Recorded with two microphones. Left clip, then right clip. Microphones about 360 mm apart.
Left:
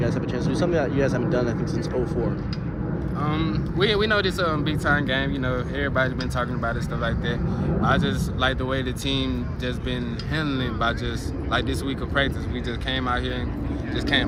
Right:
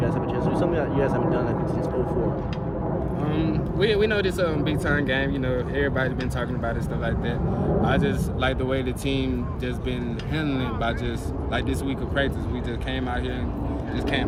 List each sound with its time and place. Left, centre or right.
0.0 s speech: left
3.2 s speech: centre
10.3 s speech: centre